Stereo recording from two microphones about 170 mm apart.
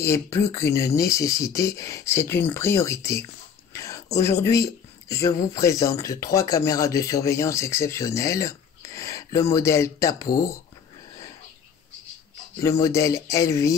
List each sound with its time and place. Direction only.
0.0 s speech: 15° left (ahead or behind)
3.7 s a sound: 20° left (ahead or behind)
5.1 s speech: 20° left (ahead or behind)
10.1 s speech: 60° left (ahead or behind)
12.6 s speech: 20° left (ahead or behind)